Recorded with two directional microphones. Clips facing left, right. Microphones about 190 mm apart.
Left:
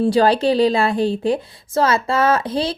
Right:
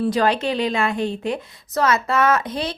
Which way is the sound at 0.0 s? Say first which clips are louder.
Left 5 dB; 30° left (ahead or behind).